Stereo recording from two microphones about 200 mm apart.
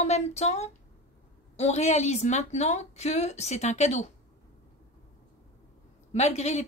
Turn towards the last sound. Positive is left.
turn(degrees=35)  # may be behind; listen again after turning